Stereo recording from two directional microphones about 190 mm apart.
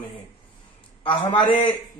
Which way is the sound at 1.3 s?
25° left (ahead or behind).